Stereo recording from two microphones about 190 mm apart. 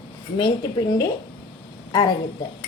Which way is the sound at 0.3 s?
25° left (ahead or behind).